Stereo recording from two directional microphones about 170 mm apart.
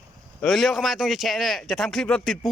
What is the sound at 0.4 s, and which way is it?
Speech, centre (ahead or behind).